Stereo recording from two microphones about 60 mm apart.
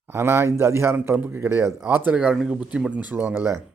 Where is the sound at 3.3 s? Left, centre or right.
Right.